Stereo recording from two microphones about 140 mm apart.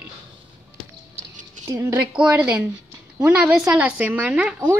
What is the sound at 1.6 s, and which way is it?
Speech, 25° right (ahead or behind).